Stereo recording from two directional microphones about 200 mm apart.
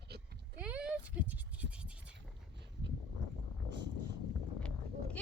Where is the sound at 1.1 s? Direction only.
5° right (ahead or behind).